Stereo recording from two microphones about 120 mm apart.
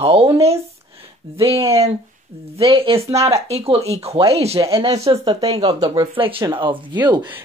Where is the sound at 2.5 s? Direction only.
50° right (ahead or behind).